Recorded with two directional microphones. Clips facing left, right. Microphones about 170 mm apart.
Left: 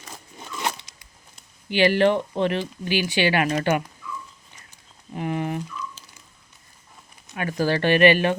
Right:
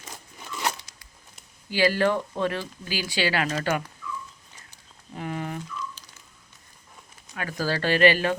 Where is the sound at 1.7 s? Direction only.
20° left (ahead or behind).